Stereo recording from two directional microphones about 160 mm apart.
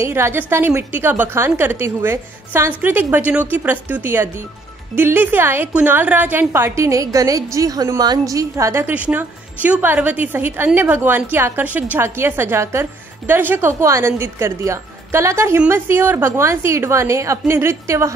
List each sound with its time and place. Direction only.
0.0 s a woman's voice: 15° right (ahead or behind)